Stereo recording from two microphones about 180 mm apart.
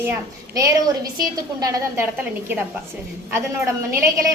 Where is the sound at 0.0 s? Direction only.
15° right (ahead or behind).